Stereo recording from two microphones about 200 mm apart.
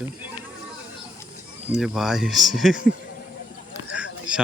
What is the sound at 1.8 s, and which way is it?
Speech, centre (ahead or behind).